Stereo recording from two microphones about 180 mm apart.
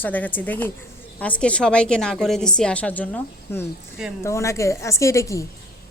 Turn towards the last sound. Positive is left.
turn(degrees=15)  # may be behind; listen again after turning